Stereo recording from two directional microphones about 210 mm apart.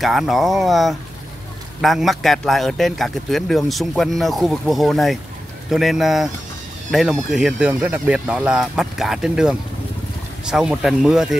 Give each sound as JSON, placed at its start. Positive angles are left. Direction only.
{"t": 0.0, "sound": "a man's voice", "side_deg": 0}